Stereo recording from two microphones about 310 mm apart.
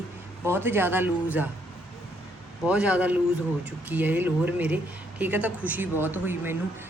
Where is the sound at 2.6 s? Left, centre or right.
Centre.